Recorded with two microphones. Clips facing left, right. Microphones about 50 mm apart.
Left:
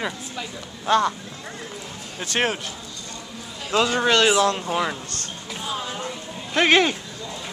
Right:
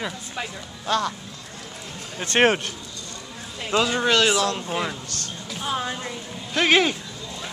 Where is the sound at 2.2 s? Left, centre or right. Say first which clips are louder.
Right 5 dB; right.